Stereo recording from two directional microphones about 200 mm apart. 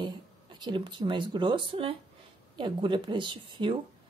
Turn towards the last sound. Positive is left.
turn(degrees=-25)  # may be behind; listen again after turning